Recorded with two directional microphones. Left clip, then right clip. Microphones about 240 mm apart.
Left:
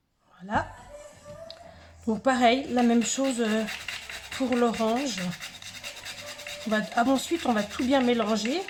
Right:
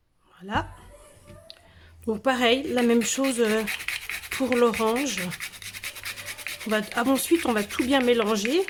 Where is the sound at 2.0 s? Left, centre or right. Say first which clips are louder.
Even; right.